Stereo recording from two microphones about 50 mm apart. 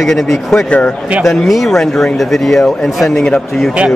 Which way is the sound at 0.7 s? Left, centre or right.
Left.